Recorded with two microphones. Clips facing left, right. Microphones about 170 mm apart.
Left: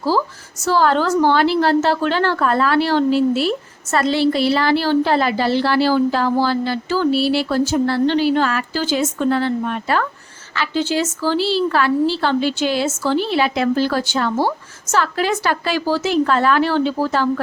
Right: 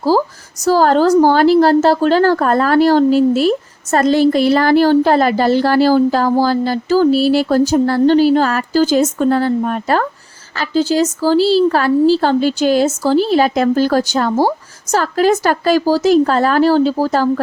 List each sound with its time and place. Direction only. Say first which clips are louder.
0.1 s a woman's voice: right 5 dB; 40° right (ahead or behind)